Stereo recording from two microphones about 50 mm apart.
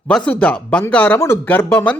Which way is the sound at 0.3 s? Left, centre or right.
Left.